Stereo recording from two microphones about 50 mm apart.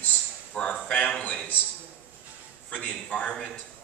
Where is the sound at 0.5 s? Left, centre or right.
Centre.